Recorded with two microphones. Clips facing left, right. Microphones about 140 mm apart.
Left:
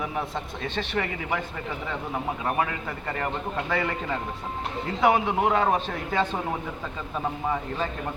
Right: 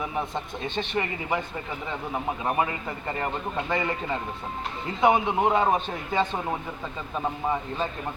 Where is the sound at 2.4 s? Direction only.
20° right (ahead or behind).